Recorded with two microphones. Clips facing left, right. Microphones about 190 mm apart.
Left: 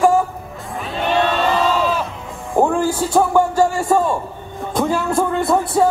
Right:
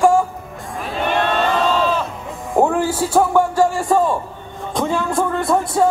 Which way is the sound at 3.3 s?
Centre (ahead or behind).